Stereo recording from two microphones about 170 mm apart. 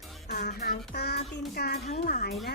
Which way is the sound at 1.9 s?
55° left (ahead or behind).